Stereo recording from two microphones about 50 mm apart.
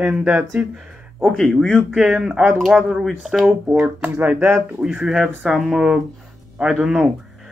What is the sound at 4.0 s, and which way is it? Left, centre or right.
Speech, right.